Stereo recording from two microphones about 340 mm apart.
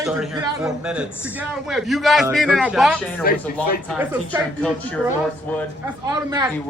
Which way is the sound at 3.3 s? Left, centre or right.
Left.